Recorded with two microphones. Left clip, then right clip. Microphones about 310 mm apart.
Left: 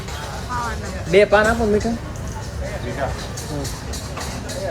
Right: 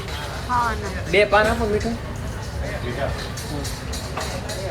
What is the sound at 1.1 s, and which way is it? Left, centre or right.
Speech, left.